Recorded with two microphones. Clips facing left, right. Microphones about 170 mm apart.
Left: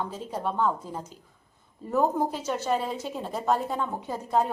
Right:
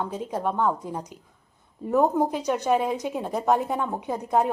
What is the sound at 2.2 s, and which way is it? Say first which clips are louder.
A woman's voice: right 4 dB; 10° right (ahead or behind).